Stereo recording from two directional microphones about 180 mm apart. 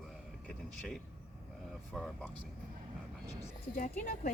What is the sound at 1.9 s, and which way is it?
Speech, 5° left (ahead or behind).